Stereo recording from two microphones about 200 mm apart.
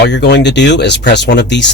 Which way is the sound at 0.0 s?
55° left (ahead or behind).